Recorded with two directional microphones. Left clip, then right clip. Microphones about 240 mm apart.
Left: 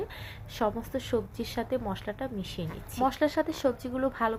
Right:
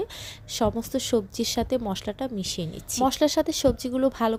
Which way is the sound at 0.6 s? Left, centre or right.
Right.